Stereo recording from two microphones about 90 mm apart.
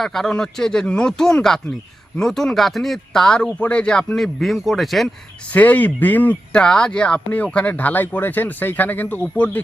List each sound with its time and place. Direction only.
0.0 s speech: 5° left (ahead or behind)
5.5 s speech: 20° left (ahead or behind)
6.6 s speech: 10° left (ahead or behind)